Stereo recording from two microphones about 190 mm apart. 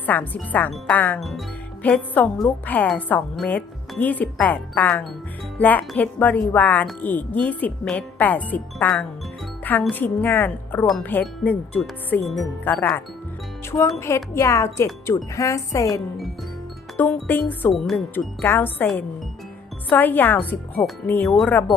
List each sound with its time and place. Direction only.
0.0 s speech: 10° left (ahead or behind)
14.3 s speech: 15° left (ahead or behind)
17.0 s speech: 10° left (ahead or behind)